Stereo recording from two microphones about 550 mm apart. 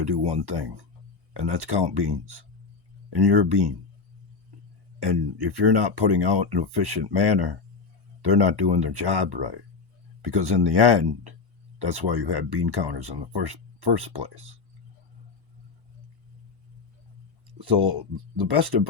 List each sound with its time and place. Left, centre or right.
0.0 s speech: right
4.9 s speech: right
17.6 s speech: right